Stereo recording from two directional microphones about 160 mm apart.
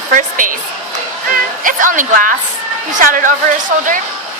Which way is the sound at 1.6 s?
55° right (ahead or behind).